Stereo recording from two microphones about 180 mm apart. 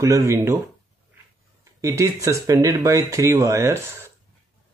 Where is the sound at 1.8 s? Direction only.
15° right (ahead or behind).